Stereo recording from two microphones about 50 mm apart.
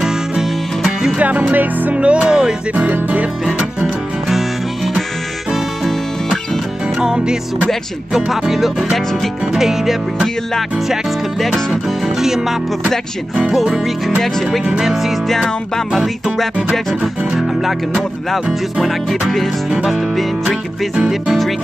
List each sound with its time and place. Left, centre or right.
0.0 s music: centre
1.5 s music: right
2.0 s music: right
2.7 s music: right
4.3 s music: centre
7.0 s music: centre
8.1 s music: centre
11.7 s music: centre
15.2 s music: centre
17.0 s music: centre
20.4 s music: centre